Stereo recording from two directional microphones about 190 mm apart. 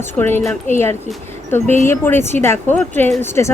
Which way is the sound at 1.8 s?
10° left (ahead or behind).